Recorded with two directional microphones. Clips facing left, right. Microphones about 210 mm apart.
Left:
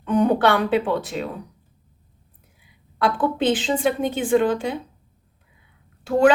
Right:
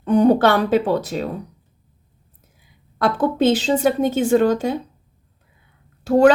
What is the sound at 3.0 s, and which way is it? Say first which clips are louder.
A woman's voice: right 3 dB; 40° right (ahead or behind).